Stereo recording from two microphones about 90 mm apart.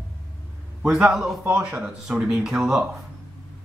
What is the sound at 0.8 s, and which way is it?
A man's voice, 5° right (ahead or behind).